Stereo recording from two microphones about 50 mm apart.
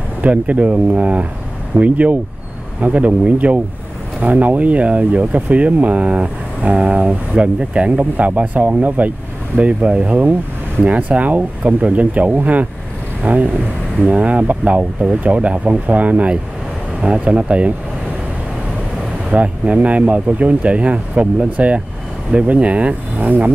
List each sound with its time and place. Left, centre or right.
0.2 s speech: right
19.3 s speech: right